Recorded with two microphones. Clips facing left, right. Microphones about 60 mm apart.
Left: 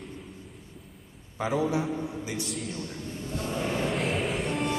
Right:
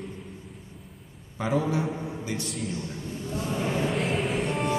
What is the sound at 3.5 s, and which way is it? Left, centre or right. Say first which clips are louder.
Vehicle: right 2 dB; centre.